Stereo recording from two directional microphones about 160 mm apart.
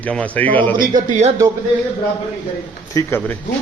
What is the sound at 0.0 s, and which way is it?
Speech, 10° left (ahead or behind).